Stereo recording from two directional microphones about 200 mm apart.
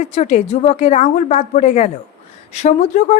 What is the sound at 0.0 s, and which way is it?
A woman's voice, 35° left (ahead or behind).